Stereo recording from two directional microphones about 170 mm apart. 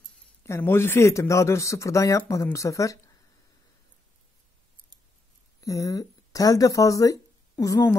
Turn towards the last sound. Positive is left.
turn(degrees=20)  # may be behind; listen again after turning